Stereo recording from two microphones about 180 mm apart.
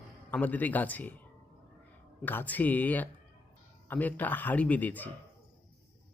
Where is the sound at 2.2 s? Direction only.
10° left (ahead or behind).